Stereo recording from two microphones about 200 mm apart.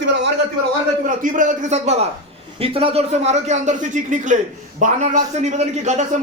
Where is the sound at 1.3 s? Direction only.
40° right (ahead or behind).